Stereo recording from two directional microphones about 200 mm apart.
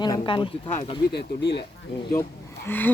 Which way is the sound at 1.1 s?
60° left (ahead or behind).